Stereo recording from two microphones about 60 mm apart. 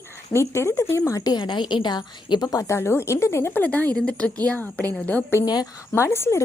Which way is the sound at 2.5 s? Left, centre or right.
Left.